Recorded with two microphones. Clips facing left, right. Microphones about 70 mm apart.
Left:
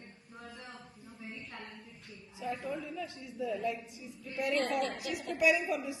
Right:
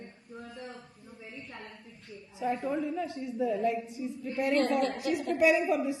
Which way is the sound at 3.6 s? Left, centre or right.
Right.